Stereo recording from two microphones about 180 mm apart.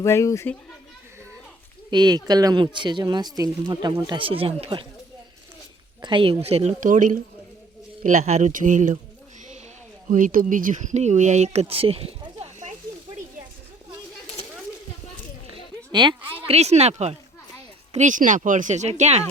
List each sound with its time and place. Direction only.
0.0 s speech: 15° left (ahead or behind)
1.9 s speech: 25° right (ahead or behind)
6.0 s speech: 25° right (ahead or behind); by 9.0 s 45° right (ahead or behind)
10.1 s speech: 45° right (ahead or behind)
11.6 s a sound: 30° right (ahead or behind)
15.9 s speech: 25° right (ahead or behind)